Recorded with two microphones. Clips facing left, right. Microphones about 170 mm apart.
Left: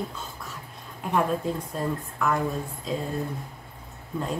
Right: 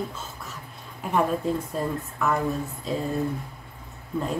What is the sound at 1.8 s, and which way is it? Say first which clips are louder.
Speech: right 1 dB; centre (ahead or behind).